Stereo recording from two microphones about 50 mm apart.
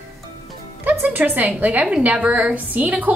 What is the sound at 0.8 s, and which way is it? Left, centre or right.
Speech, right.